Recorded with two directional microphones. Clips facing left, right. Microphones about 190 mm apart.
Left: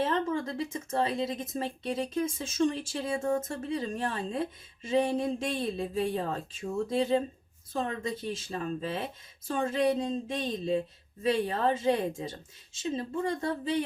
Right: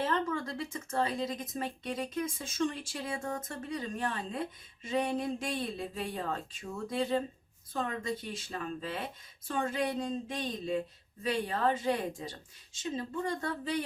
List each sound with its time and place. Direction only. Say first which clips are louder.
0.0 s speech: left 3 dB; 20° left (ahead or behind)